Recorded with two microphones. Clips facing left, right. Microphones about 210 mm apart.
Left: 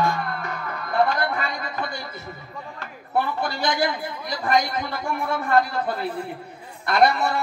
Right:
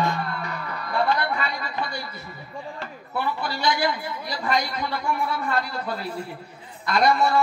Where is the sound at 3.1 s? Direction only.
50° left (ahead or behind).